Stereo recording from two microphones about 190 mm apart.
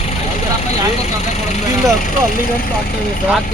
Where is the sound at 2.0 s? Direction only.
45° left (ahead or behind).